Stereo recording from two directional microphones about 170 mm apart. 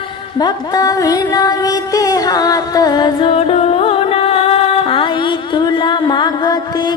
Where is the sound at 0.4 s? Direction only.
20° left (ahead or behind).